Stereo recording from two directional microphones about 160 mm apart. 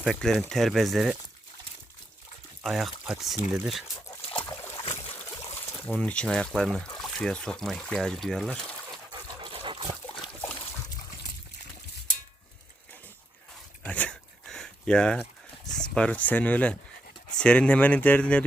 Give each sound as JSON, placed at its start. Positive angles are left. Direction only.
{"t": 0.0, "sound": "speech", "side_deg": 5}
{"t": 2.6, "sound": "speech", "side_deg": 0}
{"t": 6.0, "sound": "speech", "side_deg": 5}
{"t": 9.4, "sound": "water", "side_deg": -35}
{"t": 10.4, "sound": "splash", "side_deg": 15}
{"t": 13.8, "sound": "a sound", "side_deg": 10}
{"t": 17.3, "sound": "speech", "side_deg": 5}